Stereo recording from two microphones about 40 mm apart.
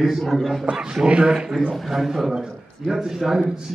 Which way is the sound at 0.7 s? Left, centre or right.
Right.